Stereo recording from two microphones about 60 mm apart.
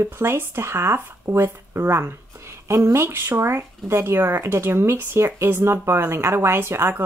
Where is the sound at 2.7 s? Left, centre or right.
Right.